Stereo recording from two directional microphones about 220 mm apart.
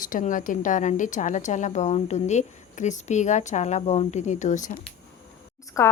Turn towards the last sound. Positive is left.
turn(degrees=15)  # may be behind; listen again after turning